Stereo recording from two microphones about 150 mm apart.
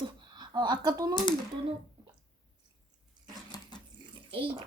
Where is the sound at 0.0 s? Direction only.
30° right (ahead or behind).